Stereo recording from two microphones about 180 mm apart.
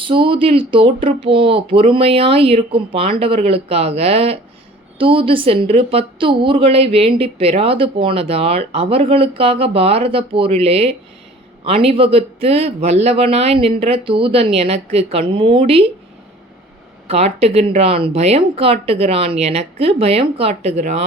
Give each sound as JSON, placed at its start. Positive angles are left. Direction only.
{"t": 0.0, "sound": "a woman's voice", "side_deg": -30}
{"t": 17.1, "sound": "a woman's voice", "side_deg": -35}